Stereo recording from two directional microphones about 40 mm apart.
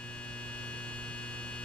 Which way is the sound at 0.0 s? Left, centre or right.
Left.